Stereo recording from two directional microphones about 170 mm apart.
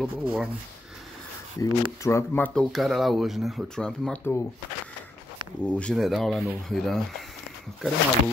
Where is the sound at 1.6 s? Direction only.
20° left (ahead or behind).